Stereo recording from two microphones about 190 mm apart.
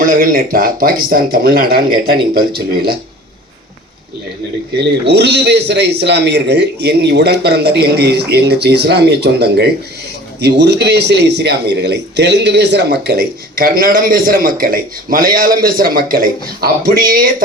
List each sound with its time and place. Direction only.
0.0 s speech: 50° right (ahead or behind)
4.8 s speech: 60° right (ahead or behind)